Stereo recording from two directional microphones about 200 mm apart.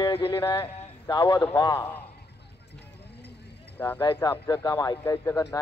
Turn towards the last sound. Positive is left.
turn(degrees=15)  # may be behind; listen again after turning